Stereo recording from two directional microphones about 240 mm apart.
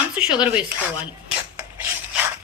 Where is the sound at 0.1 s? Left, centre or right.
Centre.